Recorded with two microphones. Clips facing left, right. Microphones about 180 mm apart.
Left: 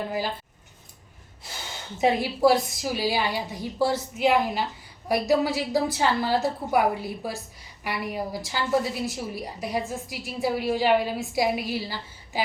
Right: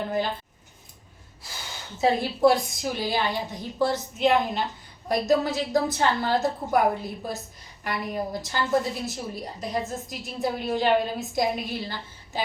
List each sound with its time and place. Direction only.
2.0 s a woman's voice: 15° left (ahead or behind)
2.4 s a woman's voice: 5° left (ahead or behind)